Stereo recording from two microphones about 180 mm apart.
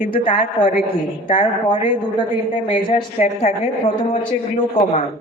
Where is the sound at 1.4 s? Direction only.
25° left (ahead or behind).